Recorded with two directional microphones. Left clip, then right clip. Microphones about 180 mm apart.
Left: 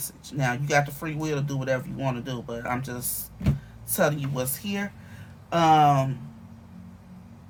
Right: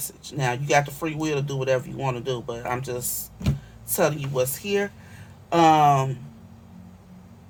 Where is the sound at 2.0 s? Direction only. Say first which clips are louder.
Right 4 dB; 55° right (ahead or behind).